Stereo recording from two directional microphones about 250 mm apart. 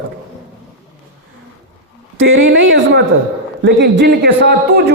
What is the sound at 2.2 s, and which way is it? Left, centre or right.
A man's voice, right.